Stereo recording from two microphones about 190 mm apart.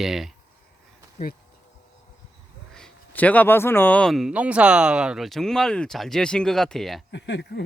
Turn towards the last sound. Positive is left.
turn(degrees=60)  # may be behind; listen again after turning